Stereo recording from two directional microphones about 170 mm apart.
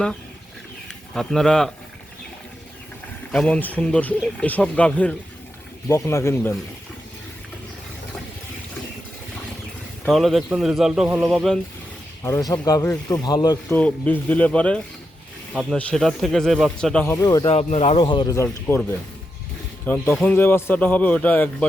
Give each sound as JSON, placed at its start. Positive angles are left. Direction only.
{"t": 1.1, "sound": "speech", "side_deg": 0}
{"t": 3.3, "sound": "a man's voice", "side_deg": 5}
{"t": 10.1, "sound": "speech", "side_deg": 0}
{"t": 12.2, "sound": "speech", "side_deg": 20}
{"t": 13.7, "sound": "a man's voice", "side_deg": 10}
{"t": 17.2, "sound": "speech", "side_deg": 20}
{"t": 17.4, "sound": "speech", "side_deg": 40}
{"t": 18.4, "sound": "a man's voice", "side_deg": 10}